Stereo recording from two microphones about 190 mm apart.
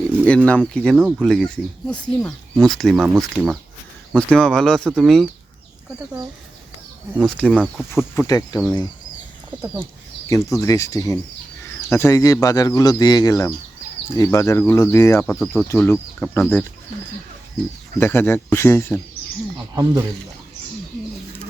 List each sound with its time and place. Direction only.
0.3 s speech: 5° left (ahead or behind)
0.9 s speech: 5° right (ahead or behind)
1.9 s speech: 5° left (ahead or behind)
7.3 s speech: 5° left (ahead or behind); by 8.6 s 20° left (ahead or behind)
9.5 s speech: 10° right (ahead or behind)
10.2 s speech: 15° left (ahead or behind)
18.0 s speech: 10° left (ahead or behind)
19.7 s speech: 20° right (ahead or behind)